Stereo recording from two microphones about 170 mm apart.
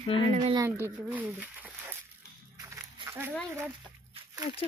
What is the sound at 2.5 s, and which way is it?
Walk, 15° right (ahead or behind).